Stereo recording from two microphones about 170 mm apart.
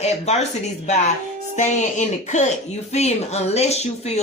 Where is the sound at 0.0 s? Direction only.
40° left (ahead or behind).